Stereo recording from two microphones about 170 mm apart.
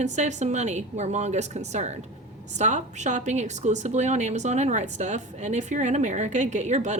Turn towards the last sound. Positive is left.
turn(degrees=-45)  # may be behind; listen again after turning